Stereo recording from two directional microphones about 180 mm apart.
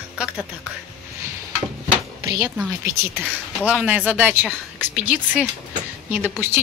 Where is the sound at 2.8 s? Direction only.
15° right (ahead or behind).